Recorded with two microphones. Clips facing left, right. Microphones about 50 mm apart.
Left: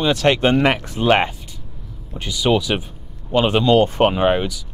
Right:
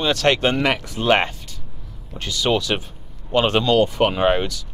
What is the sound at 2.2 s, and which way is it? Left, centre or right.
Speech, centre.